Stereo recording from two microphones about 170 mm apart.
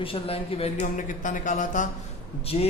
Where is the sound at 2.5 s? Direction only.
35° left (ahead or behind).